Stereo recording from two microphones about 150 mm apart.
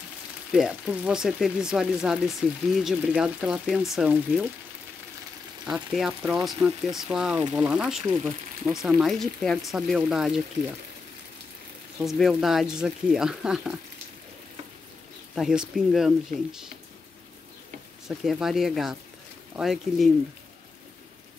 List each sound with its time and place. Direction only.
0.5 s speech: 5° right (ahead or behind)
5.7 s speech: 5° right (ahead or behind)
12.0 s speech: centre (ahead or behind)
15.3 s speech: 5° right (ahead or behind)
16.3 s speech: 55° right (ahead or behind)
18.0 s speech: centre (ahead or behind)